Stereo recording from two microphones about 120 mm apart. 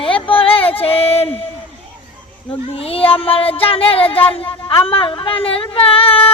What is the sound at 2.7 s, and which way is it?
A child's voice, 55° left (ahead or behind).